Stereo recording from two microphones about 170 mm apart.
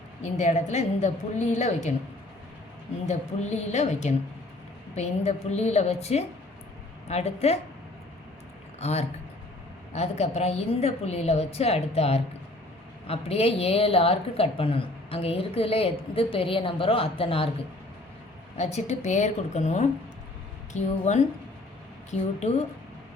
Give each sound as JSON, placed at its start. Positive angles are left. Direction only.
{"t": 0.3, "sound": "a woman's voice", "side_deg": 45}
{"t": 3.1, "sound": "a woman's voice", "side_deg": 45}
{"t": 8.8, "sound": "a man's voice", "side_deg": 40}
{"t": 18.5, "sound": "a woman's voice", "side_deg": 40}
{"t": 22.4, "sound": "a woman's voice", "side_deg": 40}